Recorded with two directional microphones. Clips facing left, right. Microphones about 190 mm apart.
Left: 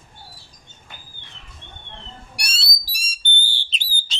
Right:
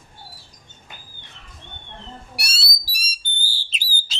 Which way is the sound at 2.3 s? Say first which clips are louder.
Right 1 dB; 5° right (ahead or behind).